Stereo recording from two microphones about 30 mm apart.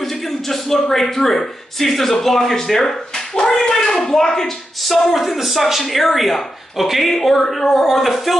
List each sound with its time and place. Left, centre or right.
0.0 s a man's voice: centre
3.3 s speech: left
5.0 s speech: centre